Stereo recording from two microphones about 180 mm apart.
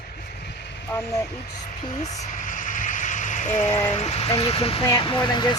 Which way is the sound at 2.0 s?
40° left (ahead or behind).